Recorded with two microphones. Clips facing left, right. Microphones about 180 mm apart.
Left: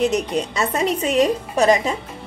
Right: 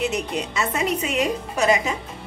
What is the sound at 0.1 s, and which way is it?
A woman's voice, 35° left (ahead or behind).